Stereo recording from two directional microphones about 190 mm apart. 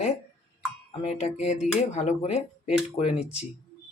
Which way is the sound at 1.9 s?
35° left (ahead or behind).